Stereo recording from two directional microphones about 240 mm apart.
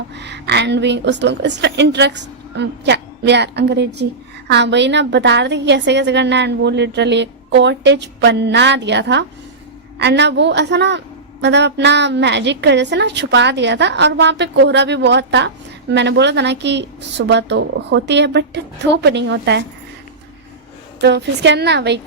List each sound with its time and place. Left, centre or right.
0.1 s a woman's voice: right
21.0 s a woman's voice: right